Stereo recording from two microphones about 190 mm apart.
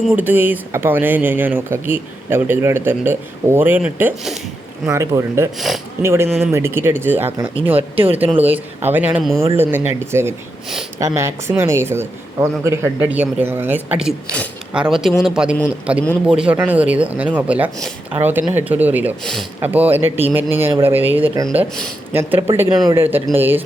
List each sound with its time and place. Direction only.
0.2 s speech: 10° right (ahead or behind)
4.9 s speech: 15° right (ahead or behind)
5.5 s speech: centre (ahead or behind)
6.0 s speech: 15° right (ahead or behind)
19.2 s speech: centre (ahead or behind)
19.5 s speech: 10° right (ahead or behind)